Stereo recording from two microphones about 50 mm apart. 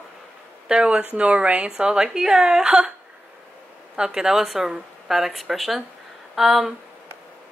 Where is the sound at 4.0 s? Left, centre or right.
Centre.